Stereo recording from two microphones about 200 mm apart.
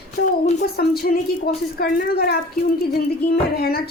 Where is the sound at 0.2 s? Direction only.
55° left (ahead or behind).